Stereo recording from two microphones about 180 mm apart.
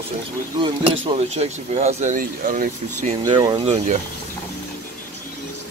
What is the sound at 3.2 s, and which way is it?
Speech, 25° right (ahead or behind).